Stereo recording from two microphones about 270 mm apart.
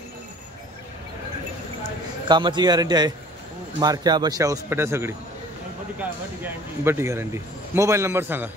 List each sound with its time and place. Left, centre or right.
2.2 s a man's voice: centre